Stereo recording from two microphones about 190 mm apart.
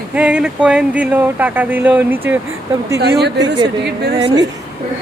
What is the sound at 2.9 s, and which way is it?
Speech, 60° right (ahead or behind).